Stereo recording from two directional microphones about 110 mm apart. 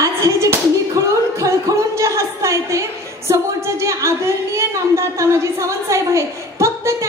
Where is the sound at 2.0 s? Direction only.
30° right (ahead or behind).